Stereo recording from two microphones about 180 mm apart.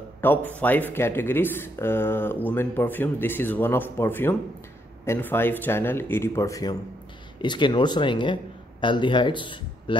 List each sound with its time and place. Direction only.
0.2 s speech: 10° left (ahead or behind); by 9.9 s 25° left (ahead or behind)